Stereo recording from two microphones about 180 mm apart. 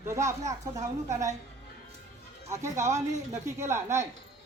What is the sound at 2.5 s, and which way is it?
Speech, 15° right (ahead or behind).